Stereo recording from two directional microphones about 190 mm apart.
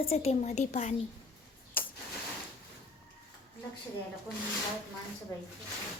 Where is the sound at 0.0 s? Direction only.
30° left (ahead or behind).